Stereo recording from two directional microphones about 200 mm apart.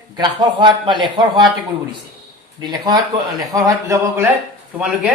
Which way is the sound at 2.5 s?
20° right (ahead or behind).